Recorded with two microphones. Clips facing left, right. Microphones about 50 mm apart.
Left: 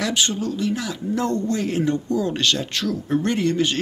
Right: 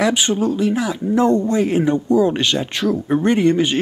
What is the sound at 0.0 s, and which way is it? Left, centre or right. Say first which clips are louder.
Speech: right 6 dB; centre.